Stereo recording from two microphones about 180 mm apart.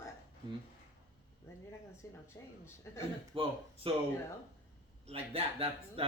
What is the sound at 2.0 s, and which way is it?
Speech, 15° left (ahead or behind).